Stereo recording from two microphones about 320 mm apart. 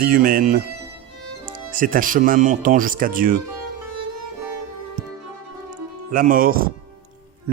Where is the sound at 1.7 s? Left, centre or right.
Right.